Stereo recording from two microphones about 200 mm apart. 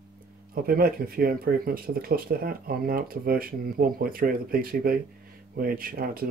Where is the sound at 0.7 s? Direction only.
45° right (ahead or behind).